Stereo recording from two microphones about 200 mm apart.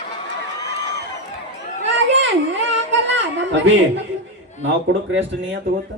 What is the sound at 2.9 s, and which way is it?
Speech, 65° right (ahead or behind).